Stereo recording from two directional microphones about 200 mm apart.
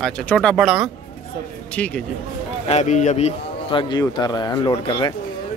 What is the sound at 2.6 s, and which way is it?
A man's voice, 35° left (ahead or behind).